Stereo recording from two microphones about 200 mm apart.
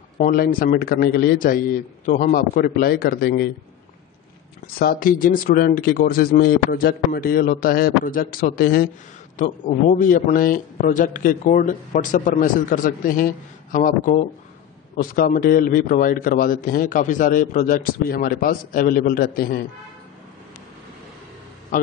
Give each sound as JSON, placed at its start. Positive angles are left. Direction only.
{"t": 0.2, "sound": "a man's voice", "side_deg": 45}
{"t": 4.7, "sound": "a man's voice", "side_deg": 45}